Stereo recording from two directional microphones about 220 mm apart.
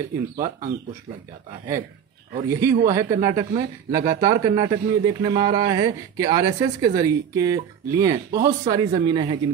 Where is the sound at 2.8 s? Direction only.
15° right (ahead or behind).